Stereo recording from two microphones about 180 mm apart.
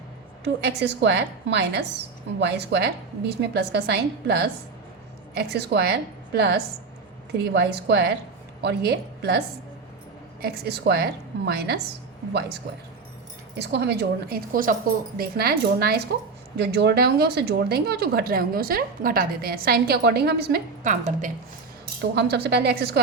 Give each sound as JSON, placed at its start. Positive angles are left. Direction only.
{"t": 0.4, "sound": "a woman's voice", "side_deg": -70}
{"t": 10.4, "sound": "a woman's voice", "side_deg": -60}
{"t": 13.6, "sound": "speech", "side_deg": -65}
{"t": 20.5, "sound": "speech", "side_deg": -45}
{"t": 22.1, "sound": "speech", "side_deg": -65}